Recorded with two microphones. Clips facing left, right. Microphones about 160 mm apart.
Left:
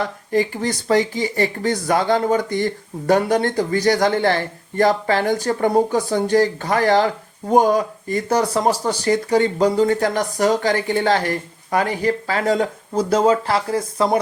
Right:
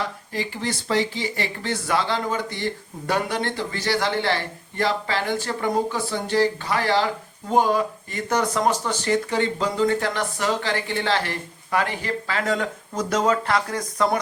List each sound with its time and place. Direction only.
0.0 s speech: 45° left (ahead or behind); by 14.2 s 30° left (ahead or behind)